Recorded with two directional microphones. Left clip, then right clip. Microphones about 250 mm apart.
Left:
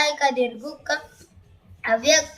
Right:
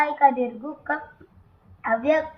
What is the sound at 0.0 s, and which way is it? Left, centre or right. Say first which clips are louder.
Speech: right 2 dB; left.